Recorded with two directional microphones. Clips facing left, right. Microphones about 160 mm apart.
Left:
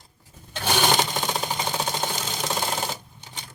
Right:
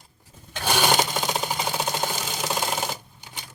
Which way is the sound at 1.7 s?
5° right (ahead or behind).